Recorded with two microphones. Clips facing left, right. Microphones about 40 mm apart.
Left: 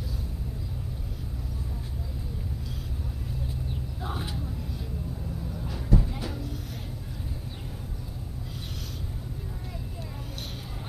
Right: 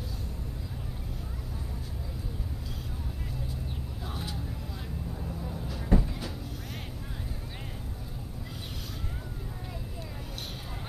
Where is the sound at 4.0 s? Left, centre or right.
Left.